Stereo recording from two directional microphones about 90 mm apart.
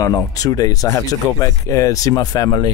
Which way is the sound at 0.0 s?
40° left (ahead or behind).